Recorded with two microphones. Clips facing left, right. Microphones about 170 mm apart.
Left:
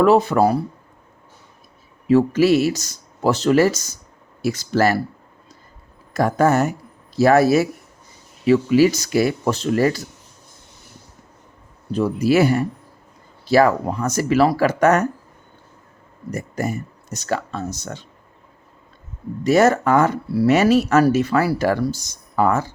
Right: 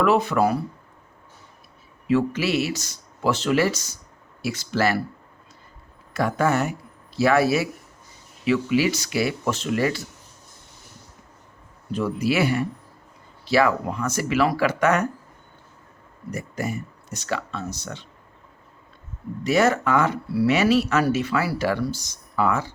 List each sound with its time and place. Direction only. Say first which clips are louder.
0.0 s speech: left 5 dB; 35° left (ahead or behind)
2.0 s speech: left 7 dB; 40° left (ahead or behind)
6.1 s speech: left 5 dB; 40° left (ahead or behind)
11.9 s speech: left 5 dB; 40° left (ahead or behind)
16.3 s speech: left 4 dB; 45° left (ahead or behind)
19.5 s speech: left 5 dB; 45° left (ahead or behind)